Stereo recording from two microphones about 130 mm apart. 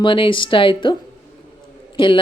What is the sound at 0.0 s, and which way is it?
Speech, 40° left (ahead or behind).